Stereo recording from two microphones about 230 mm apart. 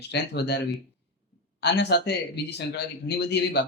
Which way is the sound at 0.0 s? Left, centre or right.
Left.